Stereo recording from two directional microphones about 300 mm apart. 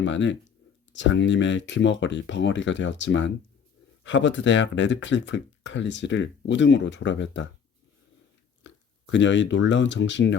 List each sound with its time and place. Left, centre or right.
0.0 s speech: left
8.6 s a sound: left
9.6 s speech: left